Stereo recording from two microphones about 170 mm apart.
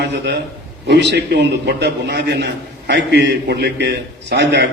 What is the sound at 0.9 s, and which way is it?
A man's voice, 85° right.